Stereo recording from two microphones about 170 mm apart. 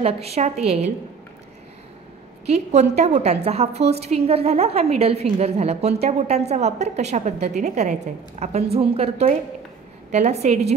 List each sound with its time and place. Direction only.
0.0 s a woman's voice: 35° right (ahead or behind)
2.4 s a woman's voice: 40° right (ahead or behind)